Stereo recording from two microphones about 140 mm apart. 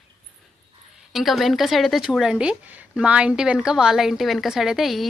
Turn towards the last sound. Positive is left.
turn(degrees=0)  # may be behind; listen again after turning